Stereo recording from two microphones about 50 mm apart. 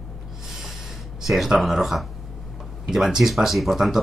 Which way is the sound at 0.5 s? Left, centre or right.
Centre.